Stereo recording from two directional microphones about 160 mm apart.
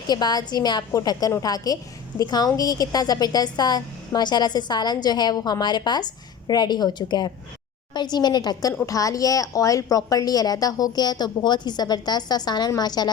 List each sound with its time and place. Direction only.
0.1 s a woman's voice: 25° left (ahead or behind)